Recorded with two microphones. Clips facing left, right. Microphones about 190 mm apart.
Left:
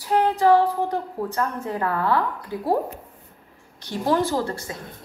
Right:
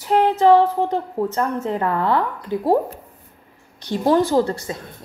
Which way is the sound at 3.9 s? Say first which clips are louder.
Right 5 dB; 20° right (ahead or behind).